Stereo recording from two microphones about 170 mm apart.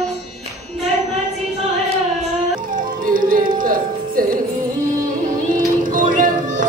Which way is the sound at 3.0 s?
55° right (ahead or behind).